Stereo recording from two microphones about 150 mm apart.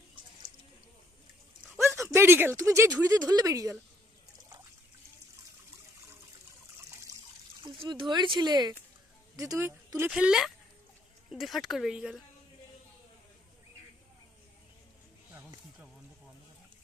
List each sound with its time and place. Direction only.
1.8 s a sound: 20° right (ahead or behind)
3.0 s speech: 25° right (ahead or behind)
7.6 s speech: 30° right (ahead or behind)
10.1 s speech: 5° right (ahead or behind)